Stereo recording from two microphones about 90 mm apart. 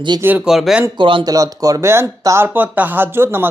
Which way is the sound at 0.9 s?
65° right (ahead or behind).